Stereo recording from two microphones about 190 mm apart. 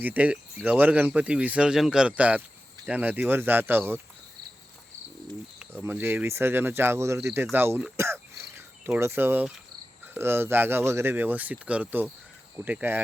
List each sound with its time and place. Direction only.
0.0 s speech: 10° right (ahead or behind)
5.5 s speech: 10° right (ahead or behind)
7.9 s a sound: 15° right (ahead or behind)
10.2 s speech: 10° right (ahead or behind)